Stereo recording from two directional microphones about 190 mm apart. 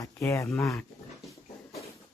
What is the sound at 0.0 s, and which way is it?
Speech, 15° left (ahead or behind).